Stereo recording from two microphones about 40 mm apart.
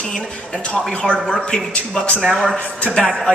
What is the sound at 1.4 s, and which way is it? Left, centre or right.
Speech, left.